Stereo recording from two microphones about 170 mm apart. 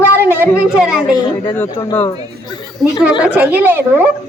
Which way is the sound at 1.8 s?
20° left (ahead or behind).